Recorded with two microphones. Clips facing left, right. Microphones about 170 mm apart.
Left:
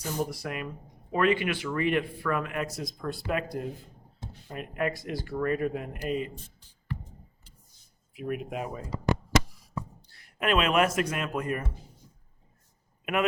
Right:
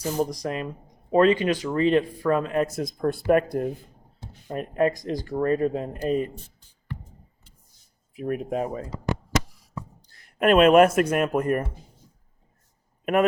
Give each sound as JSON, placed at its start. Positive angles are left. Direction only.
{"t": 0.0, "sound": "speech", "side_deg": -40}
{"t": 1.7, "sound": "speech", "side_deg": -25}
{"t": 2.7, "sound": "speech", "side_deg": -50}
{"t": 4.4, "sound": "speech", "side_deg": -40}
{"t": 8.1, "sound": "speech", "side_deg": -40}
{"t": 10.1, "sound": "speech", "side_deg": -45}